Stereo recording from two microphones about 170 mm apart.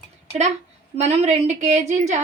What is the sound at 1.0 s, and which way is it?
A woman's voice, 40° right (ahead or behind).